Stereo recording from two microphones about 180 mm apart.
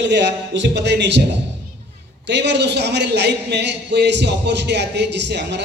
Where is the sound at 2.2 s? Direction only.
75° right (ahead or behind).